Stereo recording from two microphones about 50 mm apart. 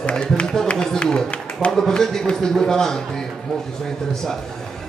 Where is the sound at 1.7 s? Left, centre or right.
Centre.